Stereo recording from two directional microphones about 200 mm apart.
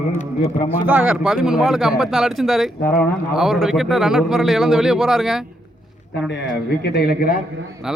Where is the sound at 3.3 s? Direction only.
Centre (ahead or behind).